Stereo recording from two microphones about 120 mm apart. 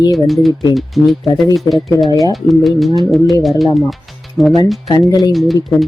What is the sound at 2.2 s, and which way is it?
Speech, centre (ahead or behind).